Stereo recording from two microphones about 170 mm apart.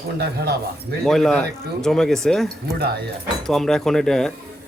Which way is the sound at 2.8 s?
70° right (ahead or behind).